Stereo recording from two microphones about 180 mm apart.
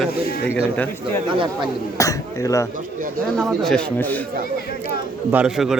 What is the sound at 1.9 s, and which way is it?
Speech, 20° left (ahead or behind).